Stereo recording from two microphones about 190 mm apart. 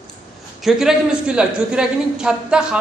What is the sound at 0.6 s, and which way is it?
A man's voice, 5° right (ahead or behind).